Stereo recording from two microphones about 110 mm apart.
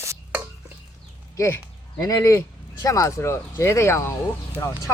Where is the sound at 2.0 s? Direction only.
35° left (ahead or behind).